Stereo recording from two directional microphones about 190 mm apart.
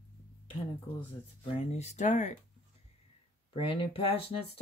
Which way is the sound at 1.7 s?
35° left (ahead or behind).